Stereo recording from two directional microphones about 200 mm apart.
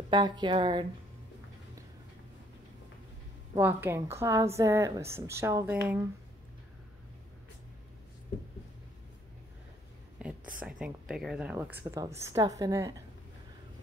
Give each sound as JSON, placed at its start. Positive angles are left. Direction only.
{"t": 0.1, "sound": "speech", "side_deg": -20}
{"t": 3.5, "sound": "a woman's voice", "side_deg": -10}
{"t": 10.2, "sound": "a sound", "side_deg": -5}
{"t": 10.6, "sound": "a woman's voice", "side_deg": -5}